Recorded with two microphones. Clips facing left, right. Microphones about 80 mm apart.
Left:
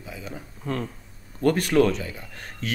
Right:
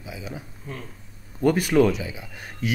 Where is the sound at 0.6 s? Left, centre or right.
Left.